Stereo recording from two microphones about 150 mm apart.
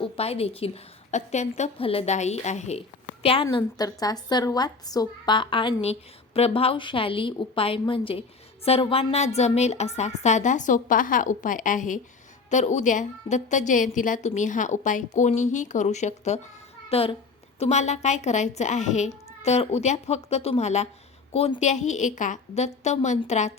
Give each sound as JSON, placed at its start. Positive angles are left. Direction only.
{"t": 0.0, "sound": "a woman's voice", "side_deg": 40}
{"t": 3.5, "sound": "a woman's voice", "side_deg": 25}